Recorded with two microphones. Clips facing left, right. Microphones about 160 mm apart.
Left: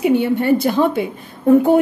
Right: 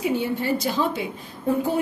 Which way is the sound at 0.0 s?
65° left (ahead or behind).